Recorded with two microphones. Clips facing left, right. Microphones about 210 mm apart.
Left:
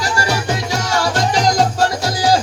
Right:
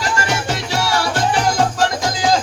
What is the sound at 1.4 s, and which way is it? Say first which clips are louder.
Music: left 2 dB; 40° left (ahead or behind).